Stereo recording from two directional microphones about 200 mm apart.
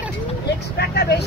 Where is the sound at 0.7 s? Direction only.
55° left (ahead or behind).